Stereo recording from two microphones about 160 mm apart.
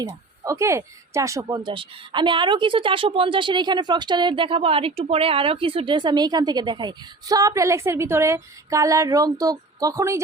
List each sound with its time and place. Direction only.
0.0 s speech: 20° right (ahead or behind)